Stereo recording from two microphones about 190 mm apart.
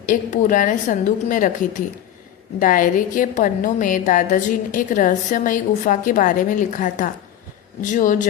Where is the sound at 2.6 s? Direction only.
45° left (ahead or behind).